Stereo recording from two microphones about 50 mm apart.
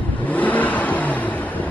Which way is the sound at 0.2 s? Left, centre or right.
Left.